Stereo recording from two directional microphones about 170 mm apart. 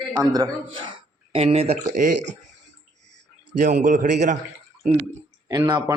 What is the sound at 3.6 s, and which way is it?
Speech, 50° right (ahead or behind).